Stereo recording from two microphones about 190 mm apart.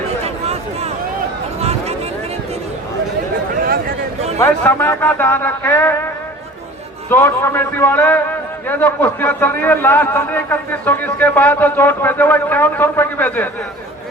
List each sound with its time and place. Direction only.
0.4 s a sound: 35° right (ahead or behind)
4.4 s a man's voice: 10° left (ahead or behind)
7.1 s a man's voice: 10° left (ahead or behind)